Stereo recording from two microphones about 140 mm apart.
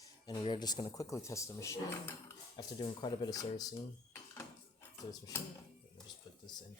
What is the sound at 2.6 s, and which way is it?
Speech, 35° left (ahead or behind).